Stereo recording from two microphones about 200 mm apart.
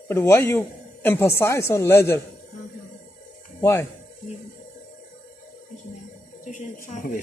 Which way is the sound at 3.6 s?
15° left (ahead or behind).